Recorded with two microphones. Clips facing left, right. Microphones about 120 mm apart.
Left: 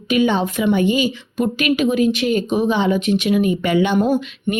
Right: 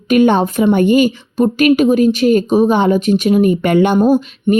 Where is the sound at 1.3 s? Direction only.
40° right (ahead or behind).